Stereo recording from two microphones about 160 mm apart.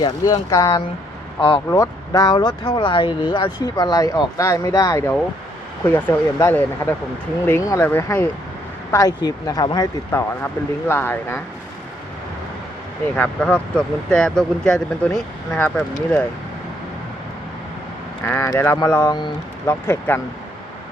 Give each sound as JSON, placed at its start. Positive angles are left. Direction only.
{"t": 0.0, "sound": "speech", "side_deg": 25}
{"t": 1.7, "sound": "speech", "side_deg": 20}
{"t": 13.1, "sound": "speech", "side_deg": 10}
{"t": 18.3, "sound": "speech", "side_deg": 15}